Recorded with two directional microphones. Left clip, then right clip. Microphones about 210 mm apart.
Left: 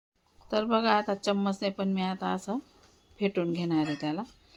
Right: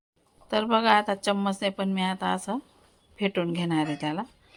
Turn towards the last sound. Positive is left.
turn(degrees=-10)  # may be behind; listen again after turning